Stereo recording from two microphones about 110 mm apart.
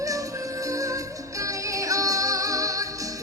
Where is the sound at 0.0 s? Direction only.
30° right (ahead or behind).